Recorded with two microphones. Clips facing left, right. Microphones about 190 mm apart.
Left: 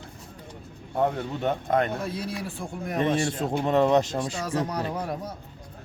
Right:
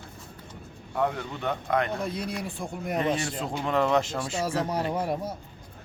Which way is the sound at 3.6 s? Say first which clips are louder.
Left 3 dB; 25° left (ahead or behind).